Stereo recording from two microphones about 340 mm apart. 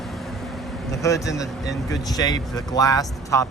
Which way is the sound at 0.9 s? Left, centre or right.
Centre.